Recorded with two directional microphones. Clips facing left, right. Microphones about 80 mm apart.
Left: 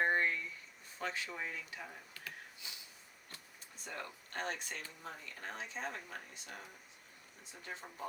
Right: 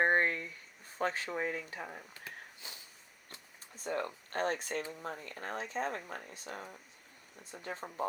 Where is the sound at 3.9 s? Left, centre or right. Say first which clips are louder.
Right 10 dB; right.